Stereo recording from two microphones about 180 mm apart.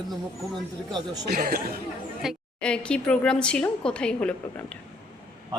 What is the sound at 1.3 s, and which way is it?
Speech, 55° right (ahead or behind).